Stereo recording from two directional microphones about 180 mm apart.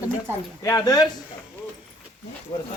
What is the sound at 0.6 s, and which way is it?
Speech, 20° left (ahead or behind).